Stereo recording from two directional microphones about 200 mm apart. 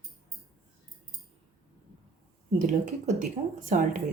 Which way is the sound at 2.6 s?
40° right (ahead or behind).